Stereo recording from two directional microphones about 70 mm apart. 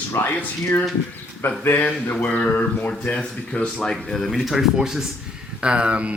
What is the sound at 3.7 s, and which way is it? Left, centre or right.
A man's voice, centre.